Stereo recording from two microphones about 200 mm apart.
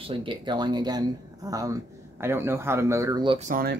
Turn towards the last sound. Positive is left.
turn(degrees=-50)  # may be behind; listen again after turning